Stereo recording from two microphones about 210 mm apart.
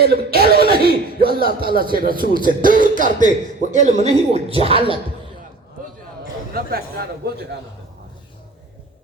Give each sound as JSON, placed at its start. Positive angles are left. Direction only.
{"t": 0.0, "sound": "a man's voice", "side_deg": -45}
{"t": 6.5, "sound": "speech", "side_deg": -45}